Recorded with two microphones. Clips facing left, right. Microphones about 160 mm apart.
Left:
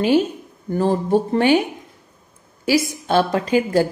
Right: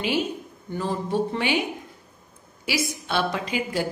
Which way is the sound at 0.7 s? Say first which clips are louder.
Left 9 dB; 40° left (ahead or behind).